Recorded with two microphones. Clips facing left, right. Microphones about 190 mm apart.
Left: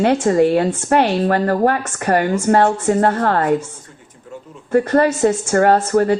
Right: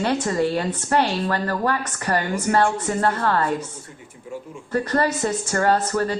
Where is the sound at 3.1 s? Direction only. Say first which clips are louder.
Left 5 dB; 50° left (ahead or behind).